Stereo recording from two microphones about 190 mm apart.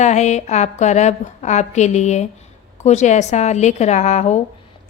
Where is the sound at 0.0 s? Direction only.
35° left (ahead or behind).